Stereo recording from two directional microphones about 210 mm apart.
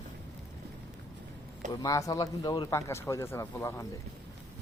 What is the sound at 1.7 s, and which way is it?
Speech, 15° left (ahead or behind).